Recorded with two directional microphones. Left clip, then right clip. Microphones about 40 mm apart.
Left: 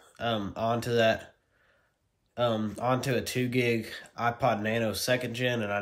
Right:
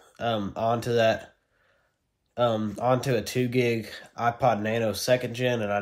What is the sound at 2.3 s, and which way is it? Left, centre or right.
Speech, left.